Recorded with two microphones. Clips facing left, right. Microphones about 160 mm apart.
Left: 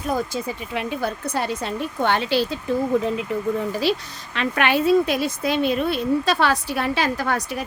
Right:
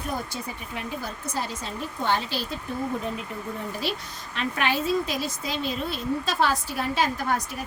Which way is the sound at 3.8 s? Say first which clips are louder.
Left 8 dB; 85° left.